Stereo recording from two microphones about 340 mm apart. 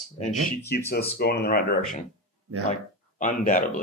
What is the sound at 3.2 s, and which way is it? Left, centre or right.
Speech, left.